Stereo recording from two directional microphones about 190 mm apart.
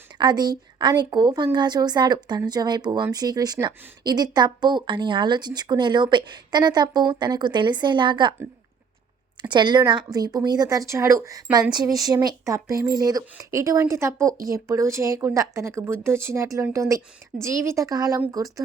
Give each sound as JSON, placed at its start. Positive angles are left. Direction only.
{"t": 0.2, "sound": "speech", "side_deg": -20}
{"t": 9.4, "sound": "speech", "side_deg": -25}